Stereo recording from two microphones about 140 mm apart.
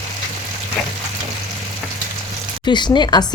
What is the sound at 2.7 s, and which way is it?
Speech, 35° left (ahead or behind).